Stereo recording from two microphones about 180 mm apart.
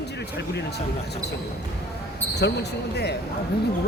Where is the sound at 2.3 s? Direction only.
70° left (ahead or behind).